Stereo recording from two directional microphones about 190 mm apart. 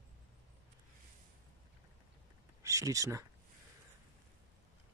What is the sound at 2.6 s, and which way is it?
Speech, 15° right (ahead or behind).